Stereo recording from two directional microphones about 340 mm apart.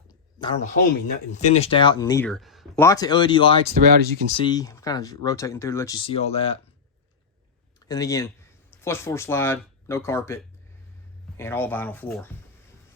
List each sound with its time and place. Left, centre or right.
0.3 s speech: centre
3.8 s speech: right
4.4 s speech: centre
7.9 s speech: centre